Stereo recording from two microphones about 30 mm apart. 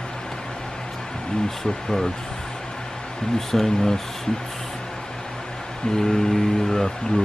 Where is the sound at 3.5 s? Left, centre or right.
Centre.